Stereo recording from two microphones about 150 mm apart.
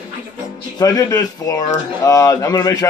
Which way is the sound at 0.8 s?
25° left (ahead or behind).